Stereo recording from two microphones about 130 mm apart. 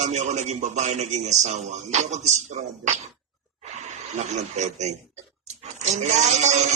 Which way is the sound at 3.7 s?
60° right (ahead or behind).